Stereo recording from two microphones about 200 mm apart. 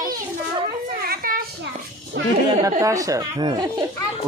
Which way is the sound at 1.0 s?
45° right (ahead or behind).